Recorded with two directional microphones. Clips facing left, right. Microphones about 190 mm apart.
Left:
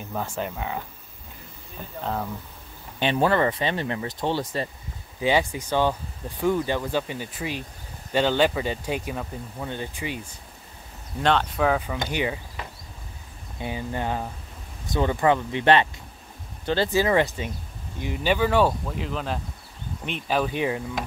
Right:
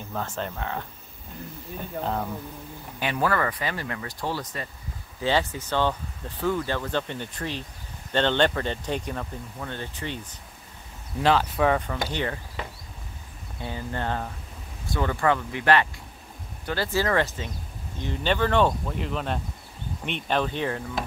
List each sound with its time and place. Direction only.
0.1 s speech: 10° left (ahead or behind)
3.0 s speech: 25° left (ahead or behind)
5.2 s speech: 15° left (ahead or behind)
11.1 s speech: 5° right (ahead or behind)
13.6 s speech: 15° left (ahead or behind)